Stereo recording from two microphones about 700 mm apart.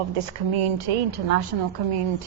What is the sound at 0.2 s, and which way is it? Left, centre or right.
A woman's voice, right.